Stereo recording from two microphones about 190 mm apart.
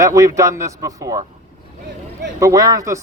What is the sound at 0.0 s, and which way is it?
A man's voice, 15° right (ahead or behind).